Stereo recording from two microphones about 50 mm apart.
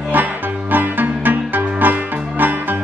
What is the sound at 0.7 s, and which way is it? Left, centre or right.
Music, right.